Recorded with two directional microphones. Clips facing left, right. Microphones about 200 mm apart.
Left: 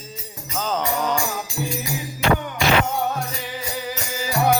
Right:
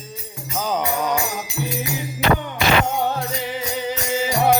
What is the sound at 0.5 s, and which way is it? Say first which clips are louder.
Music: right 1 dB; 10° right (ahead or behind).